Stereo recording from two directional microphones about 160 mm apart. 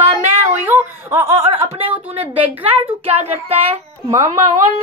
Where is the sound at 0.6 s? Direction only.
15° right (ahead or behind).